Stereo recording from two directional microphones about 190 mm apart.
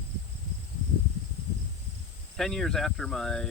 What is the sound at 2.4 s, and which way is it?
Speech, centre (ahead or behind).